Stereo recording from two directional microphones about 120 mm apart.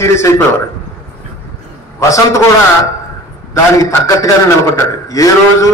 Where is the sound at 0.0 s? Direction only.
25° left (ahead or behind).